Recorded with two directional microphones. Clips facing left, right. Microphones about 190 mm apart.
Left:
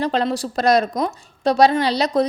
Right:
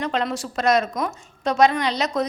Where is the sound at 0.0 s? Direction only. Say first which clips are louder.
Left 4 dB; 35° left (ahead or behind).